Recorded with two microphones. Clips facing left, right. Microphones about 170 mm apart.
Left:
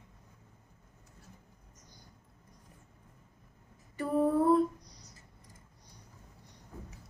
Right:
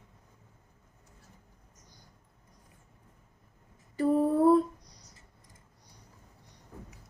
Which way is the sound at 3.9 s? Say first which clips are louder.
Right 3 dB; 35° right (ahead or behind).